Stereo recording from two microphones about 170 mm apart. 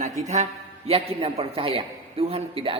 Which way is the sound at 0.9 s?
35° right (ahead or behind).